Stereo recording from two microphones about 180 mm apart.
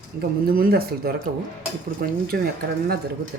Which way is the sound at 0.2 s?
55° right (ahead or behind).